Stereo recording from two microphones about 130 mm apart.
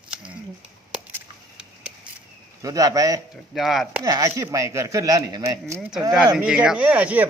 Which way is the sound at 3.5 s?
Centre (ahead or behind).